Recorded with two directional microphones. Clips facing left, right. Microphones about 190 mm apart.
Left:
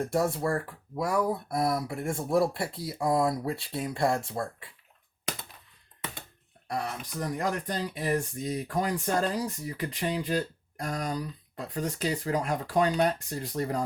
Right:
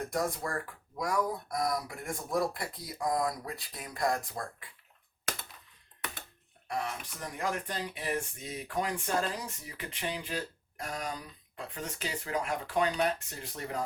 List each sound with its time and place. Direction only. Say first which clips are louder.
0.0 s speech: left 6 dB; 30° left (ahead or behind)
6.7 s speech: left 2 dB; 35° left (ahead or behind)